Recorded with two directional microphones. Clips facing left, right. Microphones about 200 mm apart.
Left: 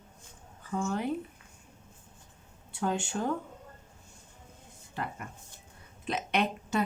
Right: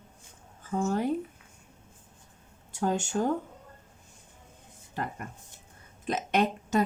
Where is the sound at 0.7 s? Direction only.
40° right (ahead or behind).